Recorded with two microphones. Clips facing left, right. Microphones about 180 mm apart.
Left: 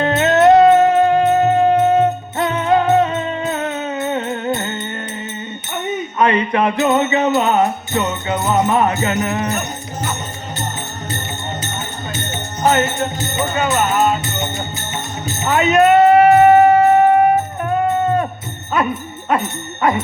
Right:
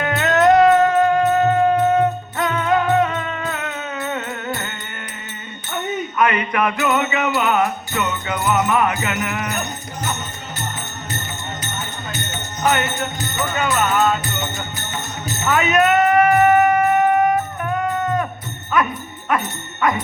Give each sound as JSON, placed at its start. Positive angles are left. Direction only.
{"t": 0.0, "sound": "music", "side_deg": 25}
{"t": 6.1, "sound": "music", "side_deg": 30}
{"t": 12.3, "sound": "music", "side_deg": 30}
{"t": 18.7, "sound": "speech", "side_deg": 30}